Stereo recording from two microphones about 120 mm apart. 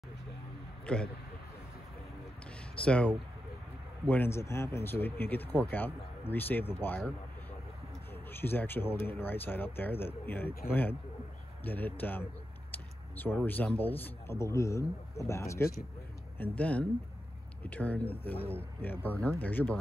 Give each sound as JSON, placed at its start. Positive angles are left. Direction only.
{"t": 0.8, "sound": "speech", "side_deg": 10}
{"t": 2.7, "sound": "speech", "side_deg": 10}
{"t": 12.7, "sound": "a sound", "side_deg": 15}
{"t": 13.7, "sound": "a man's voice", "side_deg": 15}
{"t": 16.3, "sound": "speech", "side_deg": 10}